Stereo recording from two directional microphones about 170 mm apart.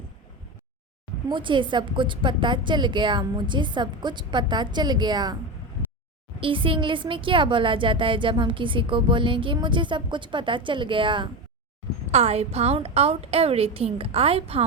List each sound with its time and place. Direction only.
1.3 s a woman's voice: 30° right (ahead or behind)
6.4 s a woman's voice: 30° right (ahead or behind)